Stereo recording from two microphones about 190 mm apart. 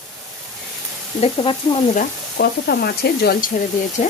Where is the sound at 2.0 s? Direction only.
55° left (ahead or behind).